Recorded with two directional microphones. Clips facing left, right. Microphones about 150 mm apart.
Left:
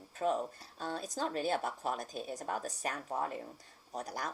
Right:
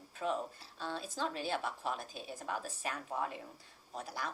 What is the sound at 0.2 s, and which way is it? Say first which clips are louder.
A woman's voice: left 4 dB; 45° left (ahead or behind).